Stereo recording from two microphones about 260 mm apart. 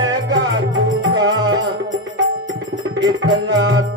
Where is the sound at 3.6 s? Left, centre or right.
Right.